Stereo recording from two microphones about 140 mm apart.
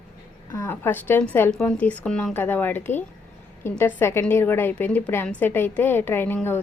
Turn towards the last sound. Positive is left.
turn(degrees=15)  # may be behind; listen again after turning